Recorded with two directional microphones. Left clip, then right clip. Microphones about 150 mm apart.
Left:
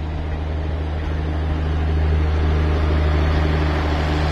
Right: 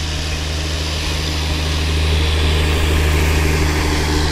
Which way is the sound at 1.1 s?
45° left (ahead or behind).